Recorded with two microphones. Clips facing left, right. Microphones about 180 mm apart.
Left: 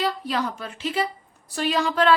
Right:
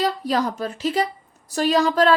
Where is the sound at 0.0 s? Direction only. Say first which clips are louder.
Right 4 dB; 40° right (ahead or behind).